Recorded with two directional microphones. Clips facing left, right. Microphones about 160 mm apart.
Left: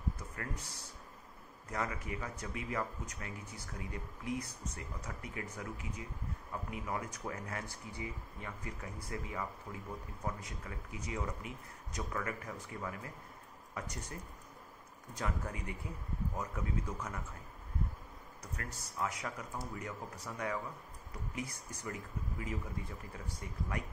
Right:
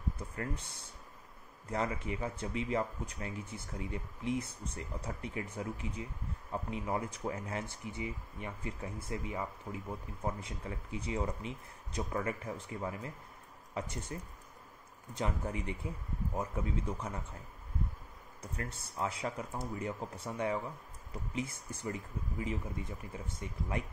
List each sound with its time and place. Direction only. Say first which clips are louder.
1.7 s speech: right 4 dB; 25° right (ahead or behind)
15.1 s speech: right 4 dB; 25° right (ahead or behind)
18.4 s speech: right 4 dB; 25° right (ahead or behind)